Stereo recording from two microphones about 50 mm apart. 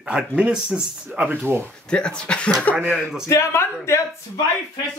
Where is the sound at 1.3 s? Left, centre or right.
Right.